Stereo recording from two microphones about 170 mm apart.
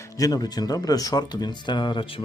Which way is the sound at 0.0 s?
20° left (ahead or behind).